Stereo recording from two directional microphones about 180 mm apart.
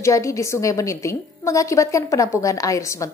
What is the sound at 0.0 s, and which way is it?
A woman's voice, 15° left (ahead or behind).